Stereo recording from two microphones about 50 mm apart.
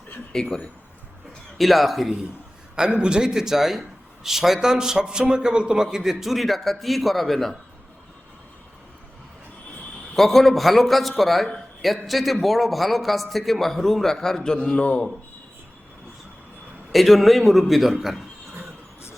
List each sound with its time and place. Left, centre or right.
0.3 s a man's voice: centre
1.5 s a man's voice: centre
2.7 s a man's voice: centre
10.2 s a man's voice: centre; by 15.0 s left
16.9 s a man's voice: centre